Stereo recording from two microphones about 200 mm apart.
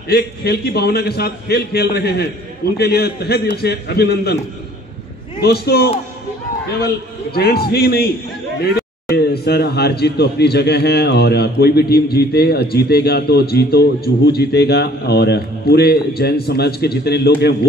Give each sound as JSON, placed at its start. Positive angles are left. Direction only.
{"t": 0.1, "sound": "a man's voice", "side_deg": 50}
{"t": 5.4, "sound": "a man's voice", "side_deg": 50}
{"t": 7.3, "sound": "a man's voice", "side_deg": 50}